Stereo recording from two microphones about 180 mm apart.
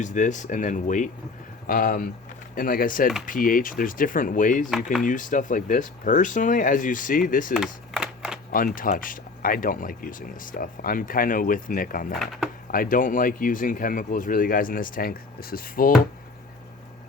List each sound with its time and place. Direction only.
0.0 s speech: 45° left (ahead or behind)
7.5 s a sound: 5° right (ahead or behind)
8.5 s speech: 50° left (ahead or behind)
12.2 s speech: centre (ahead or behind)
12.7 s speech: 50° left (ahead or behind)